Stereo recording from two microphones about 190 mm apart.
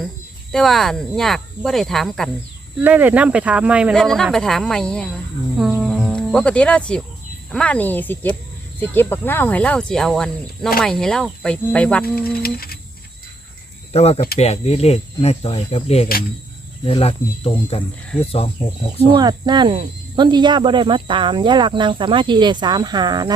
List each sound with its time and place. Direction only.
0.5 s speech: centre (ahead or behind)
2.8 s speech: 10° right (ahead or behind)
12.3 s humming: 50° left (ahead or behind)
13.9 s speech: 35° left (ahead or behind)
19.1 s speech: 20° right (ahead or behind)